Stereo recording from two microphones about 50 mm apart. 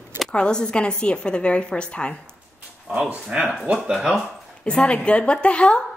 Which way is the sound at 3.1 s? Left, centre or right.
Right.